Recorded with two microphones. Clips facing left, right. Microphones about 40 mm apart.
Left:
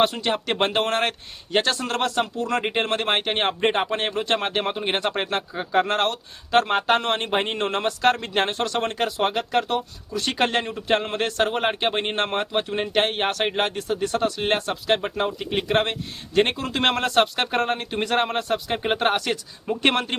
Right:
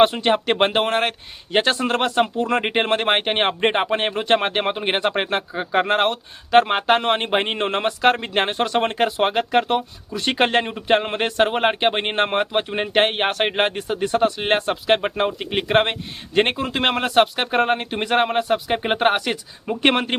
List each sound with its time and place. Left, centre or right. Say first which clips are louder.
0.0 s speech: right 5 dB; right; by 1.1 s centre
1.5 s speech: right 3 dB; right
16.6 s speech: right 1 dB; centre